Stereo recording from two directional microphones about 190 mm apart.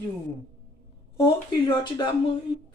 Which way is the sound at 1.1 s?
25° left (ahead or behind).